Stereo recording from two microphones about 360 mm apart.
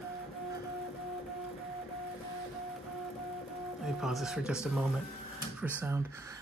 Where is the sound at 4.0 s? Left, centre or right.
Centre.